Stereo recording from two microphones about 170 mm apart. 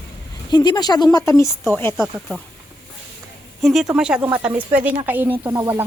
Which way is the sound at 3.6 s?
Centre (ahead or behind).